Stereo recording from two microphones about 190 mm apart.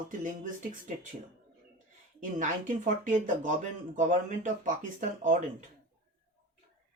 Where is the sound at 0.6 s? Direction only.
45° right (ahead or behind).